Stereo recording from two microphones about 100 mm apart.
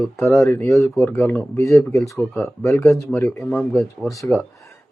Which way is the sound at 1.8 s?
30° left (ahead or behind).